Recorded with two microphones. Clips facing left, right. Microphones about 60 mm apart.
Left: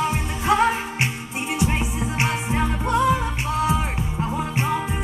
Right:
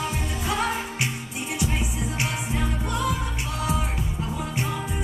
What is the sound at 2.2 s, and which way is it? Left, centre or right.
Music, left.